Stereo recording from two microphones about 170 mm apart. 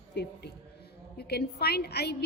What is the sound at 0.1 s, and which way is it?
A woman's voice, 75° left (ahead or behind).